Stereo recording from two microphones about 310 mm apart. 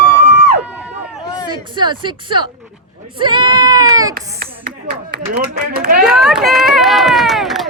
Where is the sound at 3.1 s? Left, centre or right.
Centre.